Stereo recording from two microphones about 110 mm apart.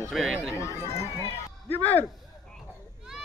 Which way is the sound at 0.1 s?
5° right (ahead or behind).